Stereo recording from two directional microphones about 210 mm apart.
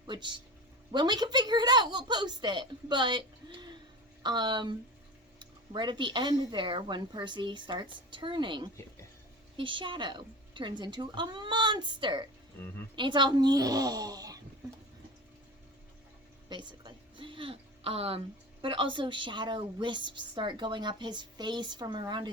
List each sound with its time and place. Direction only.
0.1 s a woman's voice: 20° right (ahead or behind)
16.5 s a woman's voice: 20° right (ahead or behind)